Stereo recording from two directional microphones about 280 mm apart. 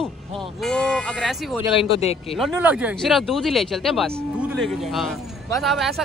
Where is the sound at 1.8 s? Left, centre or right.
Left.